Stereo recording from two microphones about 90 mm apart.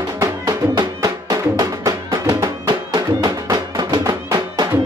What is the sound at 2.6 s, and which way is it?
Music, 50° right (ahead or behind).